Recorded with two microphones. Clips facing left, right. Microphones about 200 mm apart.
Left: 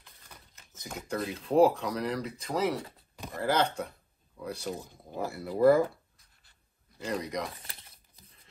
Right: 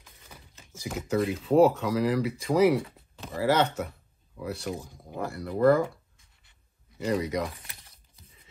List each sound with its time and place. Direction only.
0.7 s speech: 5° right (ahead or behind)
7.0 s speech: 5° right (ahead or behind)
7.6 s a sound: 30° left (ahead or behind)